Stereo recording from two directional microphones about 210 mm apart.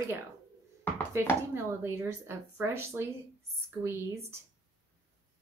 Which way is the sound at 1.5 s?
10° right (ahead or behind).